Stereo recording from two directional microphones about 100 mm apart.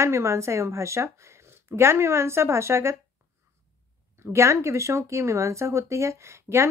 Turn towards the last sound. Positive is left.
turn(degrees=-25)  # may be behind; listen again after turning